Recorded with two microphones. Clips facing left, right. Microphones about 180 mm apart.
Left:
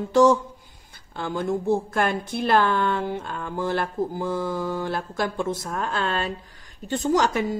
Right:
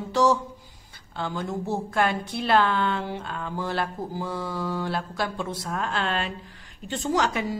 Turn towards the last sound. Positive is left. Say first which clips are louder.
# left 3 dB
turn(degrees=45)  # may be behind; listen again after turning